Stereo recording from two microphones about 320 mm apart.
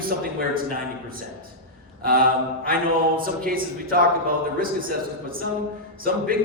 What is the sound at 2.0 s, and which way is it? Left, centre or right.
A man's voice, right.